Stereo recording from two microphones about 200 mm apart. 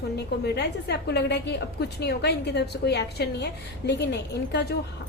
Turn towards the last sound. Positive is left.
turn(degrees=55)  # may be behind; listen again after turning